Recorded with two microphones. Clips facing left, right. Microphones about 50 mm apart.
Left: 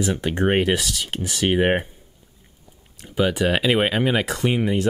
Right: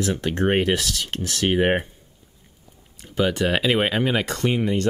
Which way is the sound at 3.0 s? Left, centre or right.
Centre.